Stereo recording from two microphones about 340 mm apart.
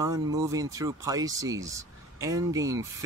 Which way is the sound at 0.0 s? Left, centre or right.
Centre.